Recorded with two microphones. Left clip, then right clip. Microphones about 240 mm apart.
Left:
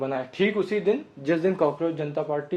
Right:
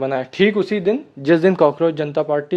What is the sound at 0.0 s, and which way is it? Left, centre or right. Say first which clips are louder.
Speech: right 8 dB; right.